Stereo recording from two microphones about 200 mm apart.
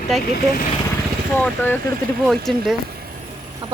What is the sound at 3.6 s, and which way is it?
Chicken, 25° right (ahead or behind).